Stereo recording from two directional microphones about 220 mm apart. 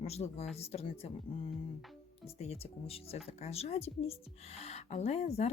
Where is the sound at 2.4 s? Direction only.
25° left (ahead or behind).